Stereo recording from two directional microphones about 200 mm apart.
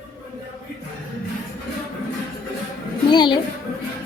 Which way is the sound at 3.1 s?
20° left (ahead or behind).